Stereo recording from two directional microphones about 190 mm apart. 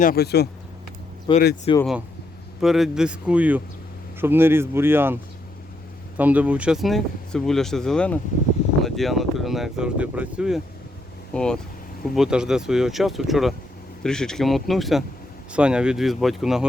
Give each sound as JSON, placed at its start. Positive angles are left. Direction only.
{"t": 0.0, "sound": "speech", "side_deg": 55}
{"t": 1.3, "sound": "speech", "side_deg": 25}
{"t": 2.6, "sound": "speech", "side_deg": 0}
{"t": 6.1, "sound": "speech", "side_deg": -10}
{"t": 11.3, "sound": "speech", "side_deg": 5}